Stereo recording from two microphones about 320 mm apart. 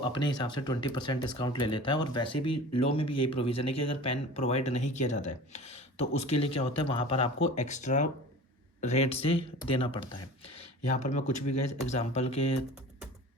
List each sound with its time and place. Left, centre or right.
0.0 s speech: centre